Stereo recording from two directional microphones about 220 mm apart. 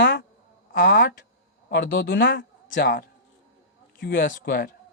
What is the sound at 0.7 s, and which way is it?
Speech, 40° left (ahead or behind).